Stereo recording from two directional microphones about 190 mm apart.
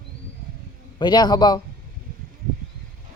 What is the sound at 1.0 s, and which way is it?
Speech, 20° left (ahead or behind).